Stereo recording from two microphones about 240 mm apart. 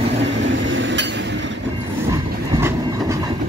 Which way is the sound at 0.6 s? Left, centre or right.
Right.